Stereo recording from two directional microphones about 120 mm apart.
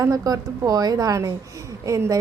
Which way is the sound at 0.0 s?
30° right (ahead or behind).